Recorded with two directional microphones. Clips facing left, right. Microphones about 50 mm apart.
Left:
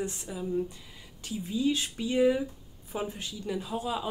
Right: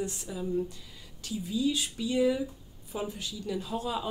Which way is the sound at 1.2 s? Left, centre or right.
Left.